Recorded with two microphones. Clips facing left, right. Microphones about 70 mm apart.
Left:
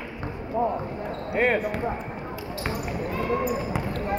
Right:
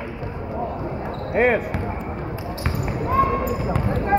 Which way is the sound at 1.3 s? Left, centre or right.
Centre.